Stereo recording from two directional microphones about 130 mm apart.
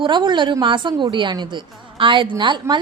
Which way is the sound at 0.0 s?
35° right (ahead or behind).